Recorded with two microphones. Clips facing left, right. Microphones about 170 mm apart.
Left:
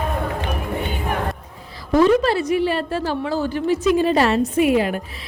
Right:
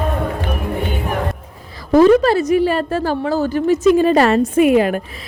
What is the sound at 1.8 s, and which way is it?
A woman's voice, 45° right (ahead or behind).